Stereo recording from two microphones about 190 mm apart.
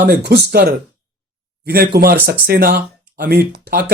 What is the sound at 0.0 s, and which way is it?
Speech, 55° right (ahead or behind).